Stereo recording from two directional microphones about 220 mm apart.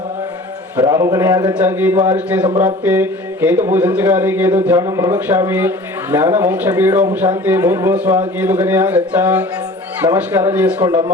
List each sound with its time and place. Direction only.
0.8 s speech: 15° right (ahead or behind)
2.5 s speech: 20° right (ahead or behind)
2.8 s speech: 10° right (ahead or behind)